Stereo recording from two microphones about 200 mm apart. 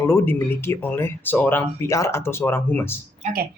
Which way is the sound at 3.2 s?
40° right (ahead or behind).